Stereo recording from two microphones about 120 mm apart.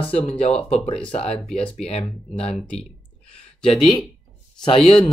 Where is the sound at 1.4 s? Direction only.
5° left (ahead or behind).